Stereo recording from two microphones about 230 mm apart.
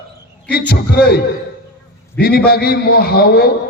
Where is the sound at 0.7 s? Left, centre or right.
Left.